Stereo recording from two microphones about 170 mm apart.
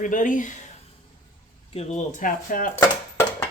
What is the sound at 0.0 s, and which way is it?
Speech, 50° left (ahead or behind).